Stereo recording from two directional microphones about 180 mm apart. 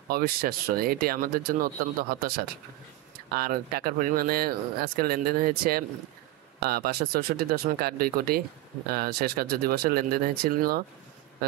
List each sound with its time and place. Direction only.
0.1 s speech: 55° right (ahead or behind)
3.3 s speech: 55° right (ahead or behind)